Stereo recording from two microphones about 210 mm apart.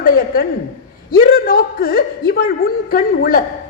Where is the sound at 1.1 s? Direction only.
45° left (ahead or behind).